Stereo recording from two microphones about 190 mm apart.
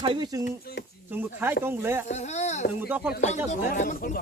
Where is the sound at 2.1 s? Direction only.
35° left (ahead or behind).